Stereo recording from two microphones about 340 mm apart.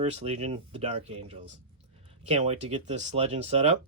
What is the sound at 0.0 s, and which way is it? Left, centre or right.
Speech, centre.